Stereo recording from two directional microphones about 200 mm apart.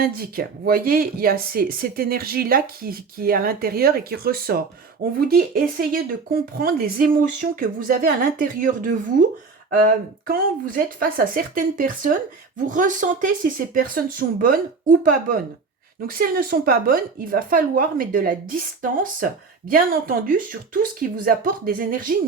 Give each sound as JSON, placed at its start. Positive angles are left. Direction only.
{"t": 0.0, "sound": "speech", "side_deg": -45}